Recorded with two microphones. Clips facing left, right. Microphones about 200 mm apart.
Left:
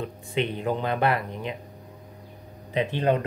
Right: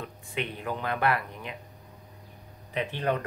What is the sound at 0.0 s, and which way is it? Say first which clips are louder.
Speech: left 7 dB; 25° left (ahead or behind).